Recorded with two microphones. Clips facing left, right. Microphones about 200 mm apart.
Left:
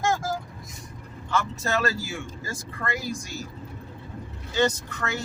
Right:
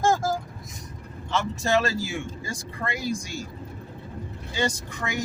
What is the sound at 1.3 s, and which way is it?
Speech, 15° right (ahead or behind).